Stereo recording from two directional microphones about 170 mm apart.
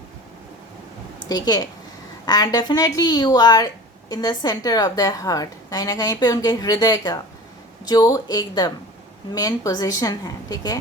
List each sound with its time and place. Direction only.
1.3 s a woman's voice: 25° left (ahead or behind)